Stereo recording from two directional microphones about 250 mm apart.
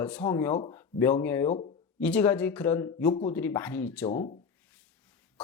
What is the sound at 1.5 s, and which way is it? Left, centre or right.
Speech, left.